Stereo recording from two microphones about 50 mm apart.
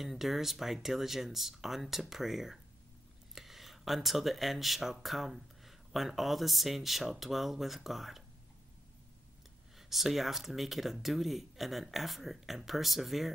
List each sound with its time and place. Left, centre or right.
0.0 s speech: centre
9.8 s speech: centre